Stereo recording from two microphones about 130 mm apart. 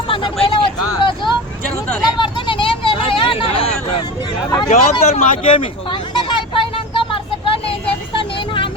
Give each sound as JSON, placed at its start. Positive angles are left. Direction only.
{"t": 0.4, "sound": "vehicle", "side_deg": 40}
{"t": 4.7, "sound": "speech", "side_deg": 55}
{"t": 5.4, "sound": "a sound", "side_deg": 40}